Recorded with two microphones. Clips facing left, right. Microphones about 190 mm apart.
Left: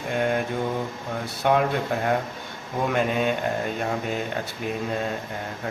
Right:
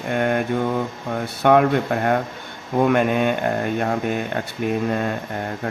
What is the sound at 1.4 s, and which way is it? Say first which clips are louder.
A man's voice: right 6 dB; 60° right (ahead or behind).